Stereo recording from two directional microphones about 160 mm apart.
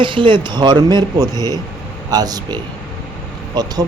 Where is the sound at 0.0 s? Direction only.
30° right (ahead or behind).